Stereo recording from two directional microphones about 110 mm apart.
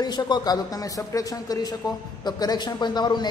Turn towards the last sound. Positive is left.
turn(degrees=40)  # may be behind; listen again after turning